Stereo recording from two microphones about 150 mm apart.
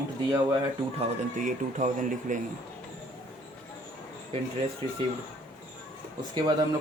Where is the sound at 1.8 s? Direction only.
60° right (ahead or behind).